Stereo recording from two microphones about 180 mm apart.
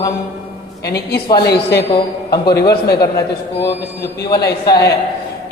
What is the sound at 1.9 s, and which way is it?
A man's voice, 25° left (ahead or behind).